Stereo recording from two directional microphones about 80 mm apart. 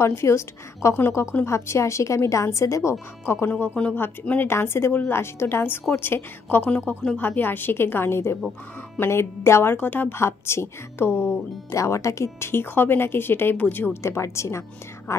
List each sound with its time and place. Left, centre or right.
0.0 s speech: left
4.5 s speech: left
6.9 s a woman's voice: centre
14.0 s speech: left